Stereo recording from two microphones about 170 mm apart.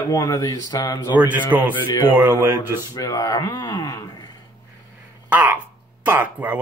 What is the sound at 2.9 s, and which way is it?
Speech, 20° left (ahead or behind).